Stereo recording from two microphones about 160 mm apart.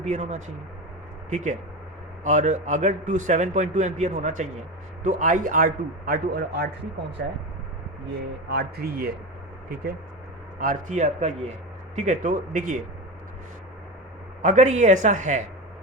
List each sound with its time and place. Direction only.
0.0 s a man's voice: 45° right (ahead or behind); by 6.7 s 70° right (ahead or behind)
8.4 s speech: 85° right
10.6 s a man's voice: 55° right (ahead or behind)
14.4 s a man's voice: 50° right (ahead or behind)